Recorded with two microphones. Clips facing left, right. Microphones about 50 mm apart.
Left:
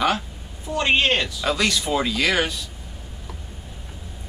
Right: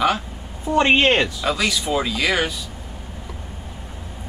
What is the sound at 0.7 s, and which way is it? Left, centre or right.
Speech, right.